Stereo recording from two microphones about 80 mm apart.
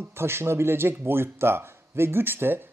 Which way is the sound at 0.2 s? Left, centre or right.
Right.